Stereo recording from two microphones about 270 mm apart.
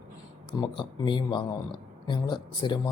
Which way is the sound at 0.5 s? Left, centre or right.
Centre.